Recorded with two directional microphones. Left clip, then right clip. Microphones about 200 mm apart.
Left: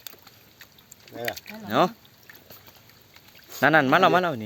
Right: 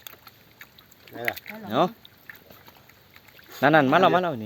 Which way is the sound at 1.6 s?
Centre (ahead or behind).